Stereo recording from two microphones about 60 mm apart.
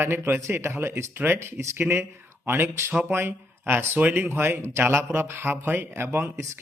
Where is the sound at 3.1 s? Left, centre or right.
Right.